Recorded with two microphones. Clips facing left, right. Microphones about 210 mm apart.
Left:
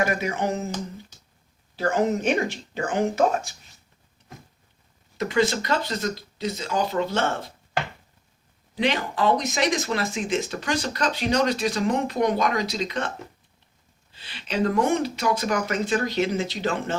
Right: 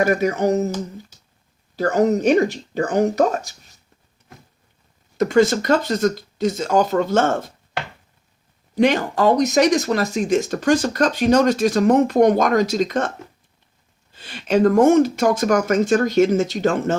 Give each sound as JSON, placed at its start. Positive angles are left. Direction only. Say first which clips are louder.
{"t": 0.0, "sound": "speech", "louder": "right 7 dB", "side_deg": -40}
{"t": 1.7, "sound": "speech", "louder": "right 5 dB", "side_deg": -40}
{"t": 5.1, "sound": "speech", "louder": "right 7 dB", "side_deg": -45}
{"t": 8.7, "sound": "speech", "louder": "right 8 dB", "side_deg": -45}
{"t": 14.1, "sound": "speech", "louder": "right 11 dB", "side_deg": -45}